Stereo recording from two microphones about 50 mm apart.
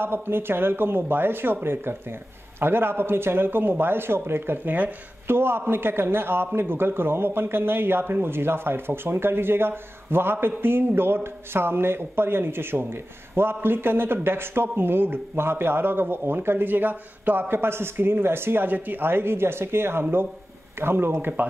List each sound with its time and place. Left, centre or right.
0.0 s a man's voice: right